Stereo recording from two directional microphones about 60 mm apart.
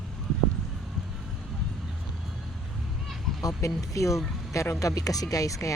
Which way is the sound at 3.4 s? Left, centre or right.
Left.